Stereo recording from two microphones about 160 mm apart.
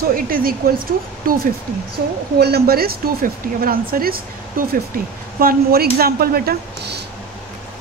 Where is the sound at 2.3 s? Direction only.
85° right.